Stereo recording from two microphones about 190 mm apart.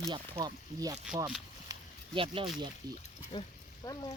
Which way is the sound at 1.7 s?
30° right (ahead or behind).